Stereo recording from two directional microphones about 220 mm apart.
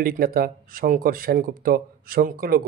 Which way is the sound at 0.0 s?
45° right (ahead or behind).